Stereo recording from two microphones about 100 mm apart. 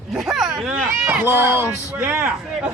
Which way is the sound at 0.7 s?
20° right (ahead or behind).